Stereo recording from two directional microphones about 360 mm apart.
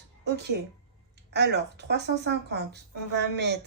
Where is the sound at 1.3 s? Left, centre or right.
Right.